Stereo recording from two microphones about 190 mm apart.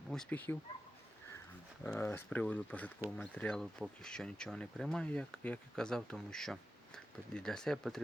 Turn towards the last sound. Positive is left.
turn(degrees=0)  # may be behind; listen again after turning